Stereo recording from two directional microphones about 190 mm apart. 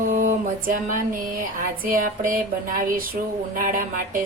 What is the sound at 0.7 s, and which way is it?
Speech, 45° right (ahead or behind).